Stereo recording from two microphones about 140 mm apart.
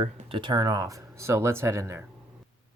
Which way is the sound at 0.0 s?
40° right (ahead or behind).